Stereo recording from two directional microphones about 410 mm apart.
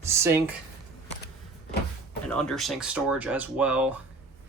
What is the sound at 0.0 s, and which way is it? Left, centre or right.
Speech, centre.